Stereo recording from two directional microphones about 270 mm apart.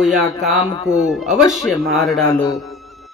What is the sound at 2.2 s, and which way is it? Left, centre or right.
Speech, centre.